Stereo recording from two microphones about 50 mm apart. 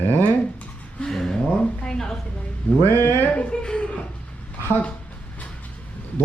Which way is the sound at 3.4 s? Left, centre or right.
Centre.